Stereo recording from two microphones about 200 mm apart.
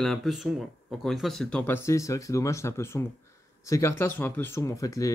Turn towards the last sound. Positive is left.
turn(degrees=15)  # may be behind; listen again after turning